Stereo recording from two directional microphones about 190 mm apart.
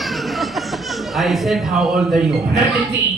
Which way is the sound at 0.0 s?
Centre (ahead or behind).